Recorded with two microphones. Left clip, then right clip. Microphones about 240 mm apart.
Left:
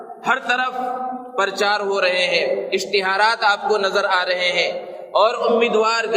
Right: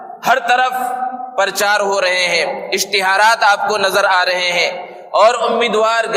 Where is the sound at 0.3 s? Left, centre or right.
Right.